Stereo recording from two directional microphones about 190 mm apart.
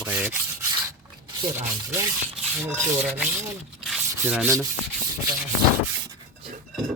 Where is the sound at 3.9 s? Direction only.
5° right (ahead or behind).